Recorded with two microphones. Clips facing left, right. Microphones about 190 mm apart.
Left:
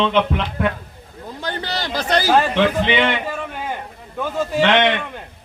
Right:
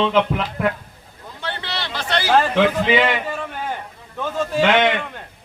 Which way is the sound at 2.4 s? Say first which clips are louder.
Even; 5° right (ahead or behind).